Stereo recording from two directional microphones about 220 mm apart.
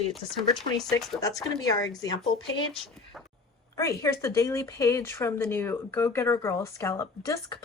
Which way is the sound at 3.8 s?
15° left (ahead or behind).